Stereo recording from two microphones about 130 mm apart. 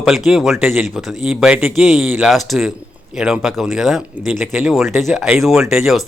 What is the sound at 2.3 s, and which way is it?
Speech, centre (ahead or behind).